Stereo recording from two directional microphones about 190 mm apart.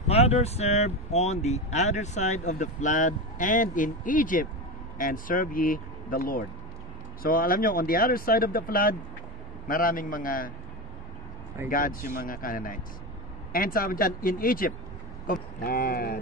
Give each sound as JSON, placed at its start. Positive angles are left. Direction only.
{"t": 0.1, "sound": "speech", "side_deg": 35}
{"t": 11.7, "sound": "speech", "side_deg": 50}